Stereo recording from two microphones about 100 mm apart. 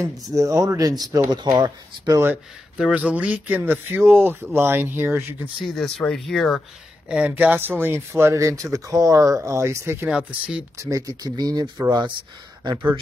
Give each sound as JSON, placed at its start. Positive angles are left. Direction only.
{"t": 0.0, "sound": "speech", "side_deg": -30}
{"t": 2.8, "sound": "speech", "side_deg": -15}
{"t": 5.6, "sound": "speech", "side_deg": 0}
{"t": 7.1, "sound": "speech", "side_deg": -10}
{"t": 10.0, "sound": "speech", "side_deg": -10}
{"t": 10.8, "sound": "speech", "side_deg": -35}